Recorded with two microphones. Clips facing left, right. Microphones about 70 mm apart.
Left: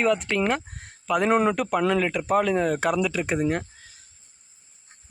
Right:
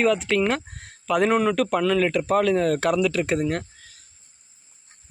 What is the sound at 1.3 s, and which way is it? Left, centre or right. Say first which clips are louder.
Speech: left 3 dB; left.